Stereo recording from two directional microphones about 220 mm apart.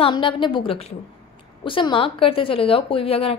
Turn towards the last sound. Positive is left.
turn(degrees=25)  # may be behind; listen again after turning